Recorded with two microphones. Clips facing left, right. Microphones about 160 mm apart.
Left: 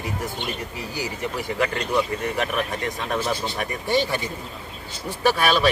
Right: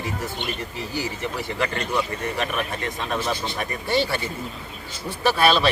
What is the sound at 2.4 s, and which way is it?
Speech, 15° left (ahead or behind).